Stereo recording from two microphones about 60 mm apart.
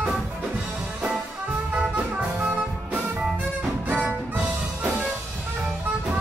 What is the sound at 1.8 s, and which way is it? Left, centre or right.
Music, right.